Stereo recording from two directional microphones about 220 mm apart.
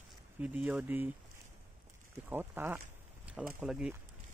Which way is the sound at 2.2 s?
10° right (ahead or behind).